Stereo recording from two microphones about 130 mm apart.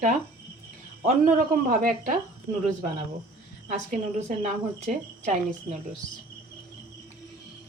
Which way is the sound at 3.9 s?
65° right (ahead or behind).